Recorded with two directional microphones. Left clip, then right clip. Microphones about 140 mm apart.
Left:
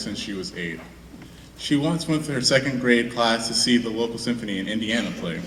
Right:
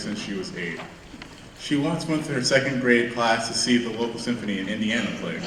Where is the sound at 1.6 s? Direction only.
35° left (ahead or behind).